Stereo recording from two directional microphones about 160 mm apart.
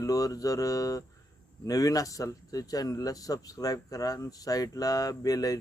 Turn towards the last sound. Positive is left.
turn(degrees=20)  # may be behind; listen again after turning